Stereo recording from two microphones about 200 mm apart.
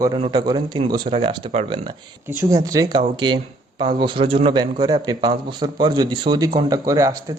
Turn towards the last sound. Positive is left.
turn(degrees=-15)  # may be behind; listen again after turning